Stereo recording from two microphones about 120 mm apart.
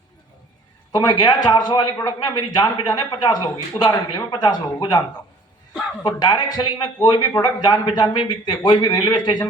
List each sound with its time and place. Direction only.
0.9 s speech: 35° left (ahead or behind)